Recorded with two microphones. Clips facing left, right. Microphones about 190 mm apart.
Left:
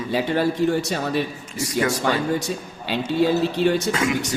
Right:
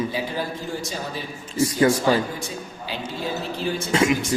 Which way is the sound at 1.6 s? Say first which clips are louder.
Right 4 dB; 30° right (ahead or behind).